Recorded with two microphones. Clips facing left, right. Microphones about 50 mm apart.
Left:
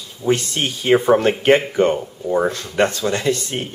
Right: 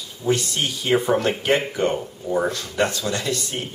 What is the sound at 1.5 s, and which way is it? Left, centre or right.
Speech, left.